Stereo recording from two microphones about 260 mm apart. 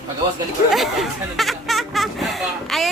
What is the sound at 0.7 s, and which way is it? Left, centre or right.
Music, centre.